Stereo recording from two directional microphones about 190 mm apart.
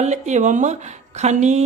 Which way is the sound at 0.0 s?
40° right (ahead or behind).